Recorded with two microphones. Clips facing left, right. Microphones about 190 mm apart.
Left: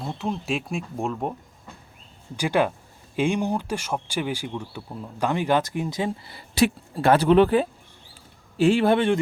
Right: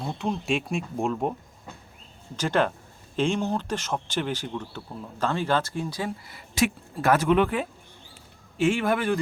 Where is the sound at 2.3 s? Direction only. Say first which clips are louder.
Left 2 dB; 10° left (ahead or behind).